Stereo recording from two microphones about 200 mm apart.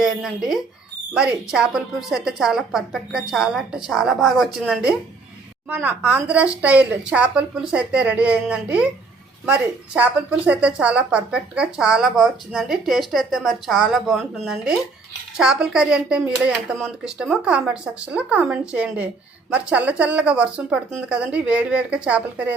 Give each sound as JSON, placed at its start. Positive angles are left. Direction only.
{"t": 0.0, "sound": "a woman's voice", "side_deg": 0}